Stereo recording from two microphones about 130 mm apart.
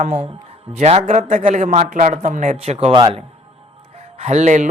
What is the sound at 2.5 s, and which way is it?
Speech, 55° right (ahead or behind).